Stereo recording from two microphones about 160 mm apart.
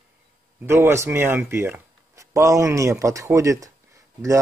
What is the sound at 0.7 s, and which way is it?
Speech, 15° right (ahead or behind).